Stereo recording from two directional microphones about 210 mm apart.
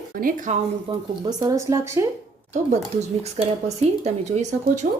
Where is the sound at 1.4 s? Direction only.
15° right (ahead or behind).